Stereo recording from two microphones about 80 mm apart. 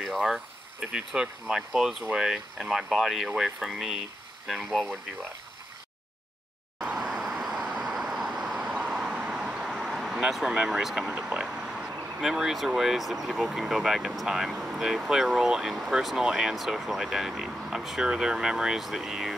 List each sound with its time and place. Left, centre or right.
0.0 s speech: centre
7.0 s vehicle: centre
11.1 s speech: centre